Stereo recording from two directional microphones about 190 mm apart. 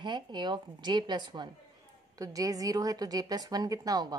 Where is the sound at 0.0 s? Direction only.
25° right (ahead or behind).